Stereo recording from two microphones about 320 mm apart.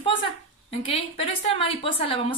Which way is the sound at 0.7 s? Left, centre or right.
Centre.